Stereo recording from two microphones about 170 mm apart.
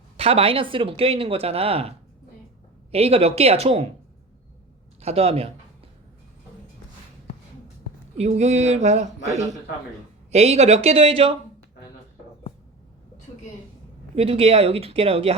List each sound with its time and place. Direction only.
0.2 s speech: 35° right (ahead or behind)
2.9 s speech: 35° right (ahead or behind)
4.9 s speech: 35° right (ahead or behind)
8.2 s speech: 40° right (ahead or behind)
10.3 s speech: 40° right (ahead or behind)
14.2 s speech: 35° right (ahead or behind)